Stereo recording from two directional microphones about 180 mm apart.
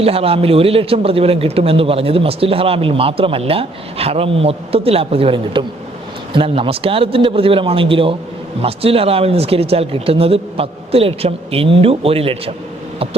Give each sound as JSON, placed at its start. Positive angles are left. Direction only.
{"t": 0.0, "sound": "a man's voice", "side_deg": -30}